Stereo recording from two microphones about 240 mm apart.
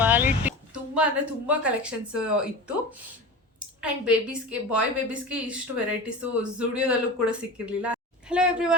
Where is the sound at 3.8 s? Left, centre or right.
Centre.